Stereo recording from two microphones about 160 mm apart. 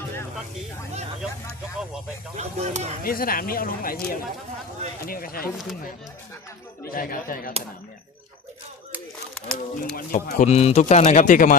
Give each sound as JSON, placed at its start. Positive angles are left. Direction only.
{"t": 2.3, "sound": "speech", "side_deg": -45}
{"t": 3.0, "sound": "speech", "side_deg": 65}
{"t": 6.9, "sound": "speech", "side_deg": 60}
{"t": 9.3, "sound": "speech", "side_deg": 5}
{"t": 9.9, "sound": "speech", "side_deg": 55}
{"t": 10.4, "sound": "a man's voice", "side_deg": 40}